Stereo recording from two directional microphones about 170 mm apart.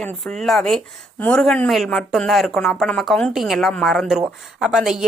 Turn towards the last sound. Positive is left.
turn(degrees=-5)  # may be behind; listen again after turning